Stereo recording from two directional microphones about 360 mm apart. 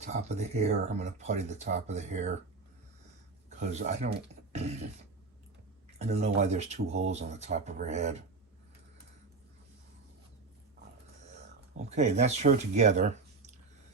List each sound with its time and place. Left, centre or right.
0.0 s speech: centre
3.6 s speech: centre
6.0 s speech: centre
11.8 s speech: centre